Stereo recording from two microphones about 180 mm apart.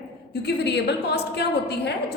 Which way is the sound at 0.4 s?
70° left (ahead or behind).